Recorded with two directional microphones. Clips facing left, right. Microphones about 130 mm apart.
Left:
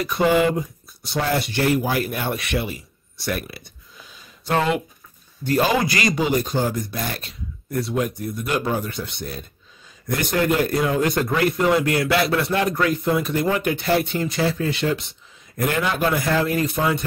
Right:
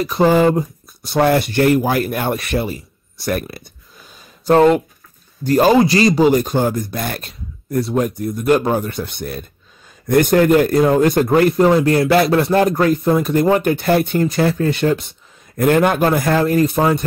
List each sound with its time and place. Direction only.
0.0 s a man's voice: 30° right (ahead or behind)
5.8 s speech: 25° right (ahead or behind)
6.2 s speech: 50° right (ahead or behind)
11.7 s speech: 30° right (ahead or behind); by 17.0 s 50° right (ahead or behind)